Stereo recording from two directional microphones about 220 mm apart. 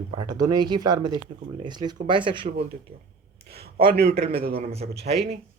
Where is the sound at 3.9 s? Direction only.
45° right (ahead or behind).